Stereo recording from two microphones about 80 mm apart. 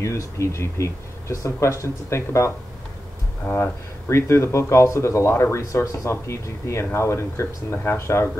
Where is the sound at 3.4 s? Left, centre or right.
Left.